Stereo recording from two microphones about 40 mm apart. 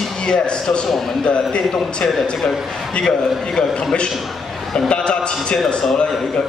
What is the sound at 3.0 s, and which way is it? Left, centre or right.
Speech, centre.